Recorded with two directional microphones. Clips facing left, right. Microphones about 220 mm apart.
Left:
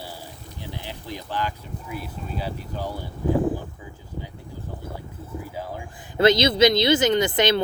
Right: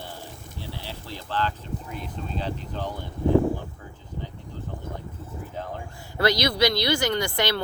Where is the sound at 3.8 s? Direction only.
10° left (ahead or behind).